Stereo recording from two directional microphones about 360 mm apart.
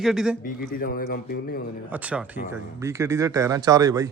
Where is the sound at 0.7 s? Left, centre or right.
Left.